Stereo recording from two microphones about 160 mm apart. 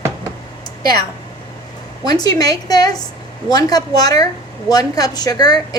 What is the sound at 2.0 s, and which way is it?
A woman's voice, 25° left (ahead or behind).